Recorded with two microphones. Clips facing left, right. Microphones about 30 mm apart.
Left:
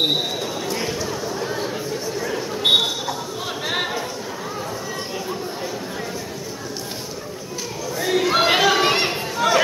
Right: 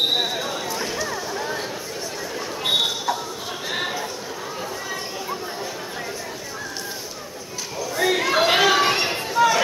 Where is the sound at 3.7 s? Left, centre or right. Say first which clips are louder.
Left 2 dB; centre.